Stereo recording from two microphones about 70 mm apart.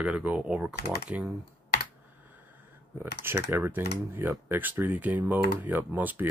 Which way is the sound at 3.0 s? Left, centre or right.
Right.